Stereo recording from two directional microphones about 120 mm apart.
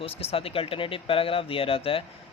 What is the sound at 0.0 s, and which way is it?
Speech, 55° left (ahead or behind).